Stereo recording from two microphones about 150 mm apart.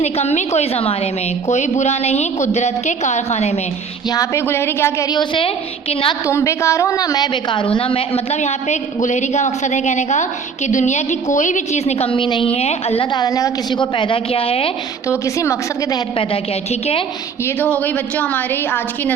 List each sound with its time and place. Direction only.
0.0 s a woman's voice: 50° left (ahead or behind)
4.1 s a woman's voice: 20° left (ahead or behind); by 6.1 s 40° left (ahead or behind)
6.2 s a woman's voice: 20° left (ahead or behind); by 13.1 s 45° left (ahead or behind)
13.1 s a woman's voice: 25° left (ahead or behind)
15.1 s a woman's voice: 20° left (ahead or behind)
17.4 s a woman's voice: 10° left (ahead or behind)